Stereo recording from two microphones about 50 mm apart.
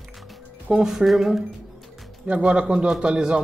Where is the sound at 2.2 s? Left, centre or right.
Right.